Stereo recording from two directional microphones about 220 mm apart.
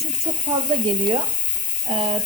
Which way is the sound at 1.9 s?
25° right (ahead or behind).